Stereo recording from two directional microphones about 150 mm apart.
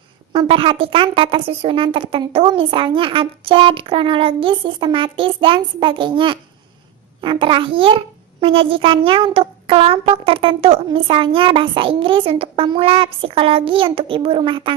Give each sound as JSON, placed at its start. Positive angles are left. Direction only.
{"t": 0.3, "sound": "a child's voice", "side_deg": -35}